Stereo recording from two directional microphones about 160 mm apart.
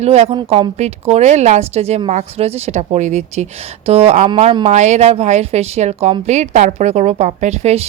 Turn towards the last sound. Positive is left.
turn(degrees=-45)  # may be behind; listen again after turning